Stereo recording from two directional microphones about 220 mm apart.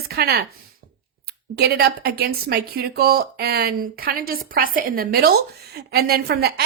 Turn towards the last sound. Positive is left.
turn(degrees=-45)  # may be behind; listen again after turning